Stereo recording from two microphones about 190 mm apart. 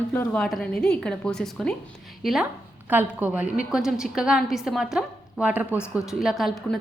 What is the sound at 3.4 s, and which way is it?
Speech, 45° left (ahead or behind).